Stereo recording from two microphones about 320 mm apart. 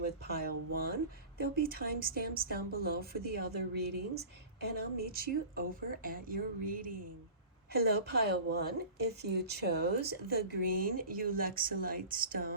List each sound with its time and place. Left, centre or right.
0.0 s a woman's voice: right